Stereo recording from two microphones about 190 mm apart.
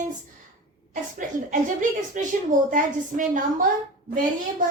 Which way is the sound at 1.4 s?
40° right (ahead or behind).